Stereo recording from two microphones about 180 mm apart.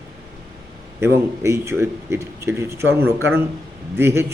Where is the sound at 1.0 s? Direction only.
15° right (ahead or behind).